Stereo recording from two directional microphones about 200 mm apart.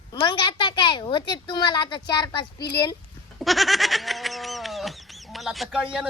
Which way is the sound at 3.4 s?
Centre (ahead or behind).